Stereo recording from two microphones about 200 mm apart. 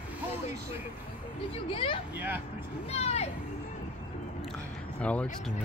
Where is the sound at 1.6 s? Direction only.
25° left (ahead or behind).